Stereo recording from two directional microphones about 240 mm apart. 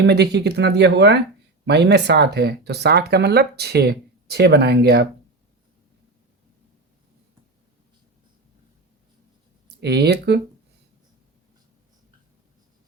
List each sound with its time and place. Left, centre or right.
0.0 s speech: right
9.6 s speech: right